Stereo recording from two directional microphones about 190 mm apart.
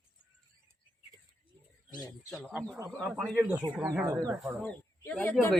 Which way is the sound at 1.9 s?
20° left (ahead or behind).